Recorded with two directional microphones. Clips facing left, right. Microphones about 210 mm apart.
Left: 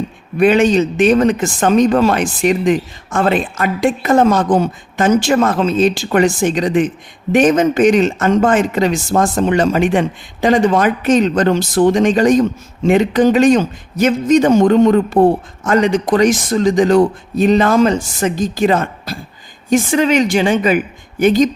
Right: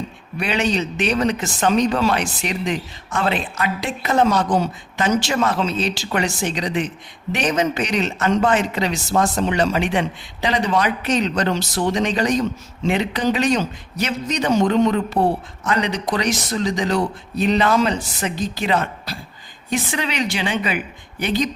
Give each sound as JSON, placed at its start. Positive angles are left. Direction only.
{"t": 0.3, "sound": "speech", "side_deg": 50}